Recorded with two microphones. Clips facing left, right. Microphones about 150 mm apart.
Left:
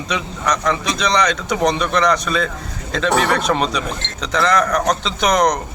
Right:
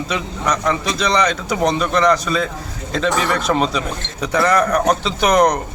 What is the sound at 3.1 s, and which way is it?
Speech, 65° left (ahead or behind).